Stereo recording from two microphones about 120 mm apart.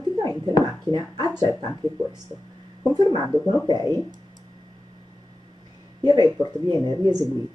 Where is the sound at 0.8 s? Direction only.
35° right (ahead or behind).